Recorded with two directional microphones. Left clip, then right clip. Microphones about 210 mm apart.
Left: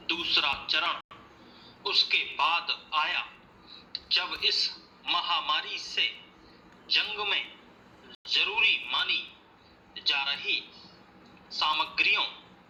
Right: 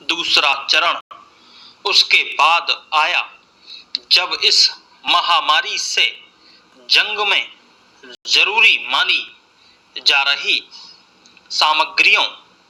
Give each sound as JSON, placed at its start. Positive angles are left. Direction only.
{"t": 0.0, "sound": "a man's voice", "side_deg": -55}